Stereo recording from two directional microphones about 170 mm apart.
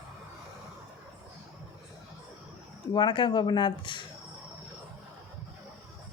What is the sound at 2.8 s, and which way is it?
Speech, 25° left (ahead or behind).